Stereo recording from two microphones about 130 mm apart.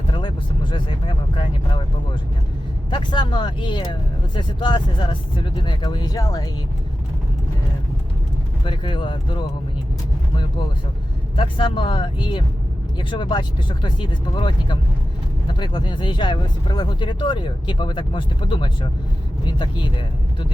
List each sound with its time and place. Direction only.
0.1 s speech: 35° left (ahead or behind)
2.9 s speech: 35° left (ahead or behind)
8.6 s speech: 40° left (ahead or behind)
11.3 s speech: 40° left (ahead or behind)